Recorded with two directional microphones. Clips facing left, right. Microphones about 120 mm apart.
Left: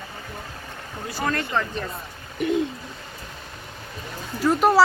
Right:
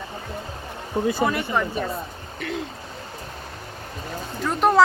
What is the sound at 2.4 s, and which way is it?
Hoot, 20° left (ahead or behind).